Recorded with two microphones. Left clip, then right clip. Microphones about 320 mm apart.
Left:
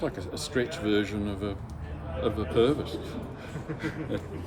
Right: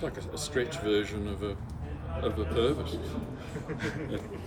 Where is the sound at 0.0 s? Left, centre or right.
Left.